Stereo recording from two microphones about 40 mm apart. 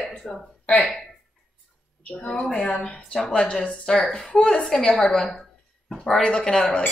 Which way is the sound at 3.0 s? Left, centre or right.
Centre.